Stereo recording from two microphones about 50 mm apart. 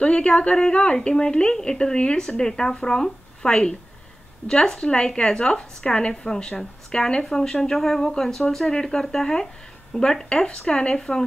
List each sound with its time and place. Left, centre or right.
0.0 s a woman's voice: left